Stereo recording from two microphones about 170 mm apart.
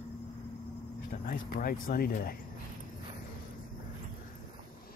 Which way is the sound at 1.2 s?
60° left (ahead or behind).